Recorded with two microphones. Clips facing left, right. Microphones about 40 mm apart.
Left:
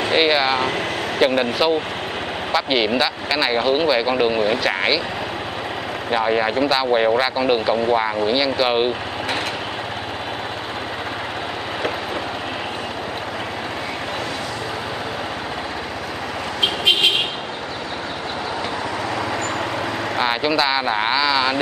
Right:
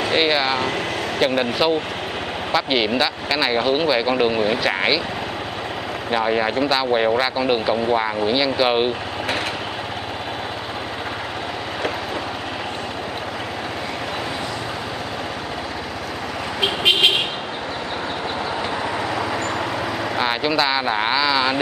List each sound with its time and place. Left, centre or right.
0.0 s speech: centre
6.0 s speech: centre
20.2 s speech: centre